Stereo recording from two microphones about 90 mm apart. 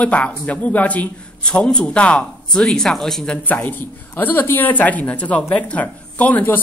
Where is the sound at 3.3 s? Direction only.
20° left (ahead or behind).